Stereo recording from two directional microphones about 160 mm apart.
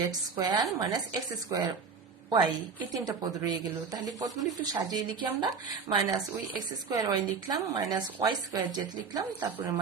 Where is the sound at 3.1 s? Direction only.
25° right (ahead or behind).